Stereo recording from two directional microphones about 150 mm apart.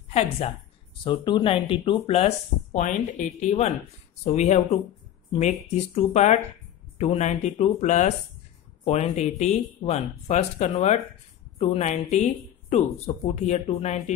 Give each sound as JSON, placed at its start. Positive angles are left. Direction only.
{"t": 0.1, "sound": "speech", "side_deg": 45}
{"t": 1.0, "sound": "speech", "side_deg": 30}